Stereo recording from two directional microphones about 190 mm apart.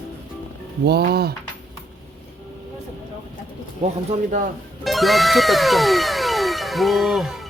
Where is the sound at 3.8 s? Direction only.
45° right (ahead or behind).